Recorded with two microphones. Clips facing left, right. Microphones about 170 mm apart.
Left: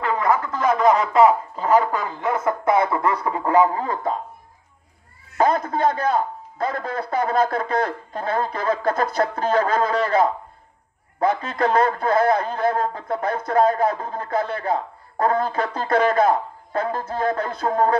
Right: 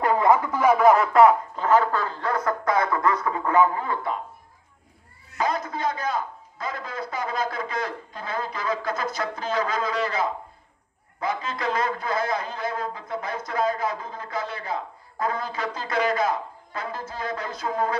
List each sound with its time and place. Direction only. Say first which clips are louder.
0.2 s speech: even; 15° right (ahead or behind); by 4.2 s 40° left (ahead or behind)
5.4 s a man's voice: left 7 dB; 55° left (ahead or behind)